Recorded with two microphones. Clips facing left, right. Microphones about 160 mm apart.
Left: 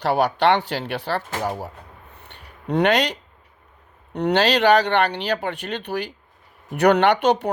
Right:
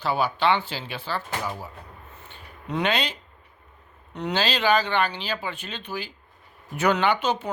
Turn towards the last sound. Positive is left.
turn(degrees=70)  # may be behind; listen again after turning